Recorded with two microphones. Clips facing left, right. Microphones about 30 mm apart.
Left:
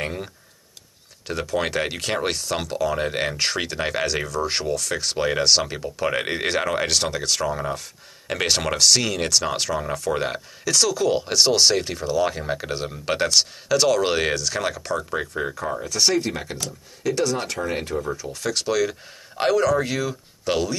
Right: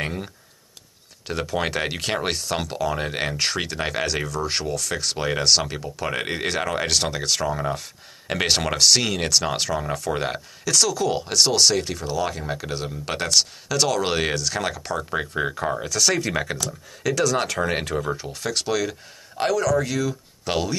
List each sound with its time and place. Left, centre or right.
0.0 s speech: centre
15.3 s speech: right
15.8 s speech: right
17.4 s speech: right
18.2 s speech: centre
19.3 s speech: centre
20.4 s speech: centre